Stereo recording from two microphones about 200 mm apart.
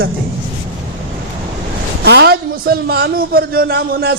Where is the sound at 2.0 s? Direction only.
55° right (ahead or behind).